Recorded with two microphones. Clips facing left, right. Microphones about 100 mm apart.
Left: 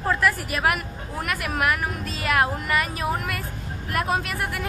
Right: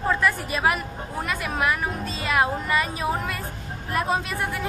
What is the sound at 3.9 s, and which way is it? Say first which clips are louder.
Music: even; 30° right (ahead or behind).